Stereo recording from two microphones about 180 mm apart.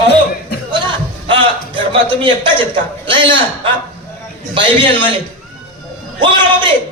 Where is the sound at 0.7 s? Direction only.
25° right (ahead or behind).